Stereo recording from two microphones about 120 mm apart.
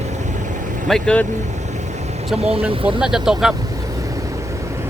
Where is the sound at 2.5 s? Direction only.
10° right (ahead or behind).